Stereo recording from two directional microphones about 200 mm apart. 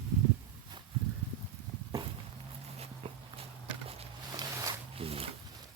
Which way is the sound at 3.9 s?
25° right (ahead or behind).